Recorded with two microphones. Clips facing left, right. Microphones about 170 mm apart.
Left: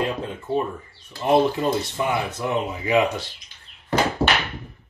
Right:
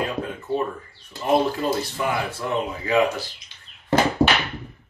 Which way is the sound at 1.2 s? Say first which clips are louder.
Left 2 dB; 20° left (ahead or behind).